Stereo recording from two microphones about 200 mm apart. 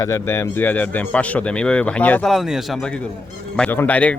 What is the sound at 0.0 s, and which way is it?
A man's voice, 15° left (ahead or behind).